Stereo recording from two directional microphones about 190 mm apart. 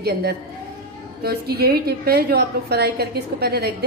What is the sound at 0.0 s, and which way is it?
A woman's voice, 55° right (ahead or behind).